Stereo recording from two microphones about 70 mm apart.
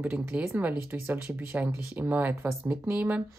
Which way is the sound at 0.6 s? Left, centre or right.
Right.